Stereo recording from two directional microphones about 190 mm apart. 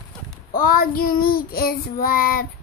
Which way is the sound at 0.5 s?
50° left (ahead or behind).